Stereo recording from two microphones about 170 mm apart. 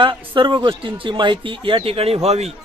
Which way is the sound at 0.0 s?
30° right (ahead or behind).